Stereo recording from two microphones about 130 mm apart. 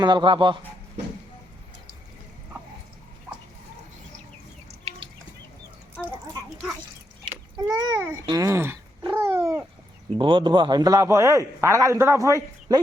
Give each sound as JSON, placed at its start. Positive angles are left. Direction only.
{"t": 0.0, "sound": "a man's voice", "side_deg": -35}
{"t": 7.6, "sound": "a child's voice", "side_deg": -20}
{"t": 9.1, "sound": "cat", "side_deg": -20}
{"t": 10.2, "sound": "a man's voice", "side_deg": -40}